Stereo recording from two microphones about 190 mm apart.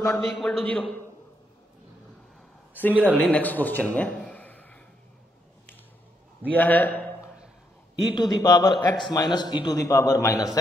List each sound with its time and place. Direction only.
0.3 s a man's voice: centre (ahead or behind)
2.7 s a man's voice: 10° left (ahead or behind)
6.5 s a man's voice: 10° left (ahead or behind)
8.1 s a man's voice: 20° left (ahead or behind)